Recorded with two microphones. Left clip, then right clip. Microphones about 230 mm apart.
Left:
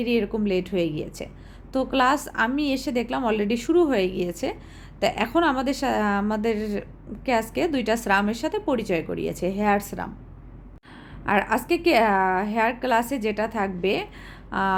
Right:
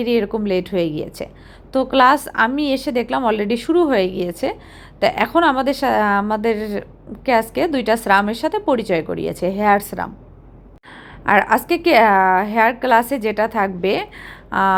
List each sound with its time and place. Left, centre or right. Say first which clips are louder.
0.0 s a woman's voice: right 6 dB; centre
11.3 s a woman's voice: right 7 dB; centre